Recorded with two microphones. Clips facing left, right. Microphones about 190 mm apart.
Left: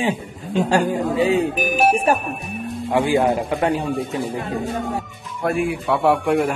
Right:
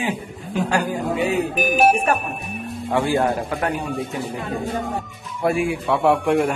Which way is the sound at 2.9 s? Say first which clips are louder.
Left 2 dB; 20° left (ahead or behind).